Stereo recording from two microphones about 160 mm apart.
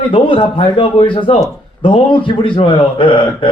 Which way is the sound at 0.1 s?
30° left (ahead or behind).